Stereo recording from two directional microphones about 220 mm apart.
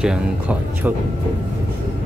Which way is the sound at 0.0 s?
5° right (ahead or behind).